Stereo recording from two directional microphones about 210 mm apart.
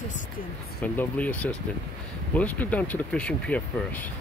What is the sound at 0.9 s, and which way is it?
Speech, 5° left (ahead or behind).